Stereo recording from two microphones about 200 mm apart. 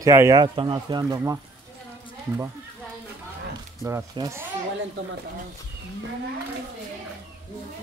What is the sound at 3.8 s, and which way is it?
Speech, 15° right (ahead or behind).